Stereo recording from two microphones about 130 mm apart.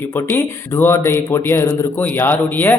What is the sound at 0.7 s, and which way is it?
Speech, 20° left (ahead or behind).